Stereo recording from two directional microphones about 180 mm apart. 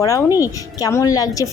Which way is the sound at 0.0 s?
20° left (ahead or behind).